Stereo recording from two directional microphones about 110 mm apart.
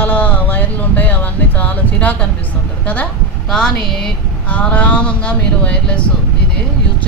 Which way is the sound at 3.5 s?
5° left (ahead or behind).